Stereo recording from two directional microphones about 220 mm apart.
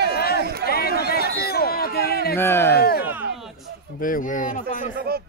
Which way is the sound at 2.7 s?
45° left (ahead or behind).